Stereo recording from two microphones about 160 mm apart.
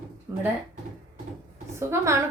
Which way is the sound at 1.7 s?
15° right (ahead or behind).